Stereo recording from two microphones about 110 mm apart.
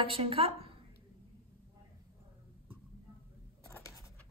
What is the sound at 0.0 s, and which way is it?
Speech, 60° right (ahead or behind).